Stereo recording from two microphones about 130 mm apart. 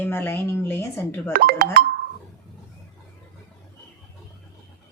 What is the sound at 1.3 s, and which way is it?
Speech, 90° right.